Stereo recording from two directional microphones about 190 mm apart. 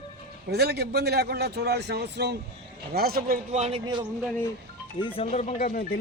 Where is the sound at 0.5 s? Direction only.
55° right (ahead or behind); by 4.0 s 25° right (ahead or behind).